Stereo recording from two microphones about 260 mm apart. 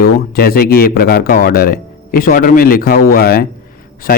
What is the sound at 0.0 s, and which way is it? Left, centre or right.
Speech, left.